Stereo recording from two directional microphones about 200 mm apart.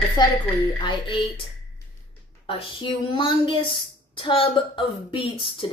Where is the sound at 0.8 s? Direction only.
25° left (ahead or behind).